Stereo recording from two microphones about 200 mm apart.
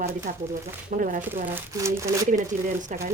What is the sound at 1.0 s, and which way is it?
Speech, 40° right (ahead or behind).